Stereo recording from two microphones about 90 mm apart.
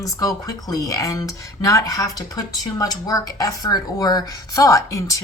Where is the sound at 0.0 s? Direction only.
40° left (ahead or behind).